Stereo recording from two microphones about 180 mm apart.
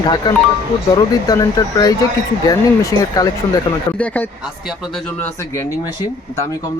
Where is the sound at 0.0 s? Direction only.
25° left (ahead or behind).